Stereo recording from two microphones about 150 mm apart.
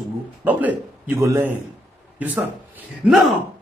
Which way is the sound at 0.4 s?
10° right (ahead or behind).